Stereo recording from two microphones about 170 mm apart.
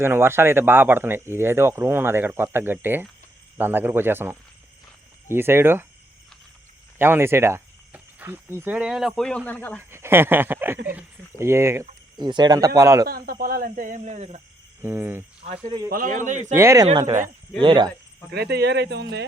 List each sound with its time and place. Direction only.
0.0 s speech: 15° right (ahead or behind)
7.0 s speech: 15° right (ahead or behind); by 9.8 s 10° left (ahead or behind)
9.9 s speech: 15° right (ahead or behind)
12.1 s speech: 25° right (ahead or behind)
13.1 s speech: 60° right (ahead or behind); by 14.4 s 40° right (ahead or behind)
14.8 s speech: 15° right (ahead or behind)
15.4 s speech: 35° right (ahead or behind)
15.6 s speech: 20° right (ahead or behind)
15.9 s speech: 55° right (ahead or behind)
16.6 s speech: 20° right (ahead or behind)
18.3 s speech: 75° right (ahead or behind); by 19.0 s 90° right